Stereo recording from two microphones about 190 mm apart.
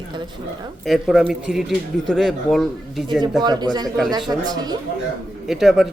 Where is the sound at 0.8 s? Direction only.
Centre (ahead or behind).